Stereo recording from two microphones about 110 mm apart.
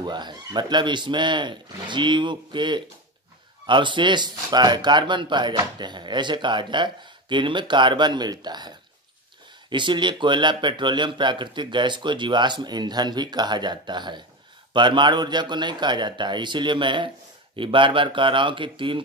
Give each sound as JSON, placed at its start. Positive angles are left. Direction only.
{"t": 0.0, "sound": "speech", "side_deg": -40}